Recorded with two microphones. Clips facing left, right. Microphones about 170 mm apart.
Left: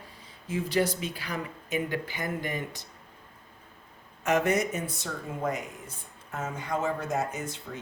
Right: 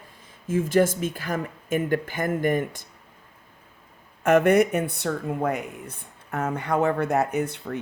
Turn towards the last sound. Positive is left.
turn(degrees=-60)  # may be behind; listen again after turning